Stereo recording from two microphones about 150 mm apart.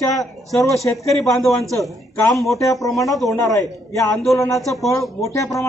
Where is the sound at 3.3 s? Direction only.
20° left (ahead or behind).